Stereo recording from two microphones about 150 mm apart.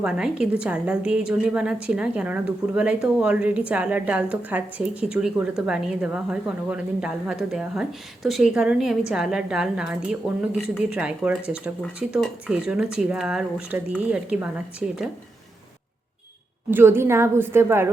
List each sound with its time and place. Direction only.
0.0 s a woman's voice: 5° right (ahead or behind)
16.7 s a woman's voice: 15° right (ahead or behind)